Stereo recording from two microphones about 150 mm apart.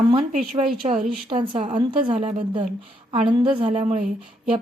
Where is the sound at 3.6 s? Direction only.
45° right (ahead or behind).